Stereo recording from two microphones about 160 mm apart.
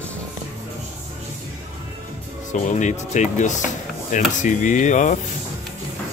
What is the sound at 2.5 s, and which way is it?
Speech, 50° left (ahead or behind).